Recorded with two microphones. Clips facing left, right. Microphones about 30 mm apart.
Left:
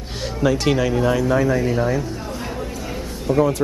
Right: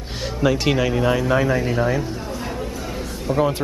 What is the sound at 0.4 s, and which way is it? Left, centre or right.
Speech, centre.